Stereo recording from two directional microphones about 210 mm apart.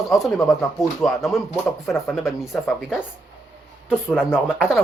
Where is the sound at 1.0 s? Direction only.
Centre (ahead or behind).